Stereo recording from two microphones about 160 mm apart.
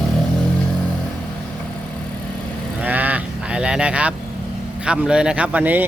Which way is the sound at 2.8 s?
10° right (ahead or behind).